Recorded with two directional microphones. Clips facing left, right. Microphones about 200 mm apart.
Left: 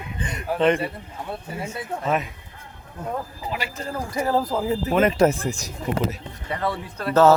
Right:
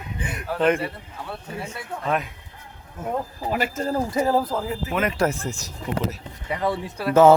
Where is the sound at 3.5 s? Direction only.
50° right (ahead or behind).